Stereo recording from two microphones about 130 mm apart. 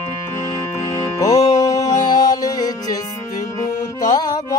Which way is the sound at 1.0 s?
25° left (ahead or behind).